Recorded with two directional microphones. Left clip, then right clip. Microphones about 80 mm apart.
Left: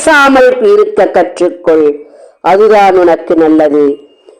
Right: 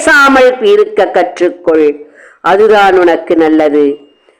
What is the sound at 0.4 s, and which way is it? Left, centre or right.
Speech, left.